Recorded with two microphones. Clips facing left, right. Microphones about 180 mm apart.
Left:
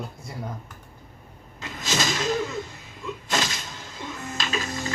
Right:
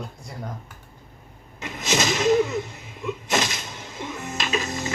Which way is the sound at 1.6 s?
20° right (ahead or behind).